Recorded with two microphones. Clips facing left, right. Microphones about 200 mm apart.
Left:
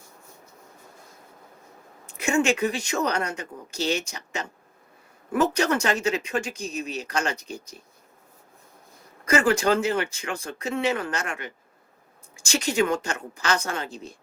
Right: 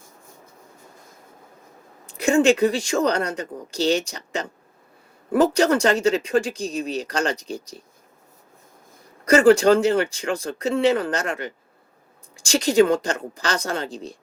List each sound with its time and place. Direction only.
2.0 s speech: 35° right (ahead or behind)
9.3 s speech: 35° right (ahead or behind)